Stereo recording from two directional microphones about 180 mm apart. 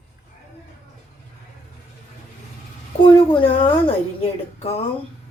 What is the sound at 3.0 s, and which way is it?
A woman's voice, 30° left (ahead or behind).